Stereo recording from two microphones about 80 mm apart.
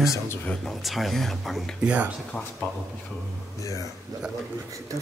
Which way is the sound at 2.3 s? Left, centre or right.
Centre.